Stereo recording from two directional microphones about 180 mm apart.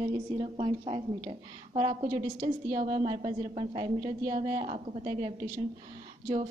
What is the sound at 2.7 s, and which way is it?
A woman's voice, 30° right (ahead or behind).